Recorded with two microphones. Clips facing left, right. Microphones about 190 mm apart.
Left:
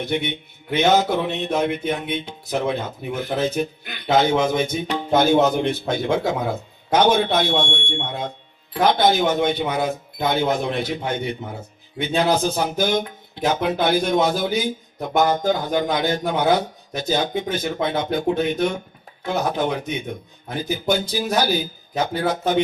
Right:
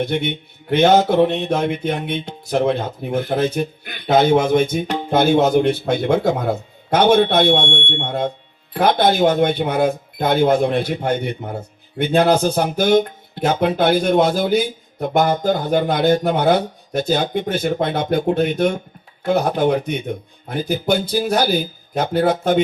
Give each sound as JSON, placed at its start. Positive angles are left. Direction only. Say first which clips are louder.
{"t": 0.0, "sound": "speech", "louder": "right 3 dB", "side_deg": -55}